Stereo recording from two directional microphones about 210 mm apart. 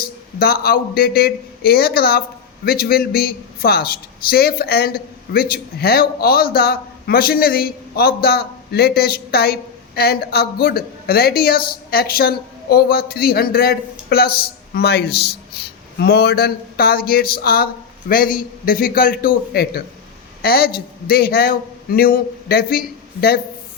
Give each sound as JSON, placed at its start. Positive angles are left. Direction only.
{"t": 0.3, "sound": "a man's voice", "side_deg": 45}